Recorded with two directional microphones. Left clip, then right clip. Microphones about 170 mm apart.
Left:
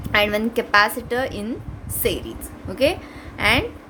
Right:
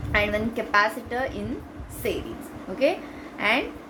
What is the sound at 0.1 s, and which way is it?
A woman's voice, 60° left (ahead or behind).